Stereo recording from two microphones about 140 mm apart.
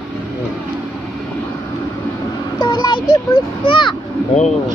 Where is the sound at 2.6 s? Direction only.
30° left (ahead or behind).